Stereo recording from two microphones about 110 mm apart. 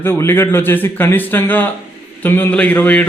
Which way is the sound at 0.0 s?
20° left (ahead or behind).